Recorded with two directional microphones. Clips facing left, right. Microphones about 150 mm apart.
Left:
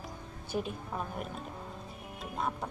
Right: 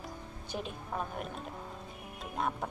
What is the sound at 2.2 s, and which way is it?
Music, centre (ahead or behind).